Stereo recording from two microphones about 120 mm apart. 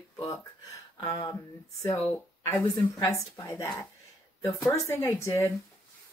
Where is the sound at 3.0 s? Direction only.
25° left (ahead or behind).